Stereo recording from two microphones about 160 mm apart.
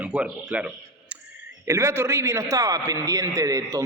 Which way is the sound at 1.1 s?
10° right (ahead or behind).